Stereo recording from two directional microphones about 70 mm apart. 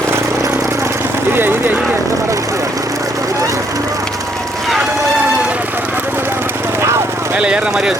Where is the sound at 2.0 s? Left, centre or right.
Right.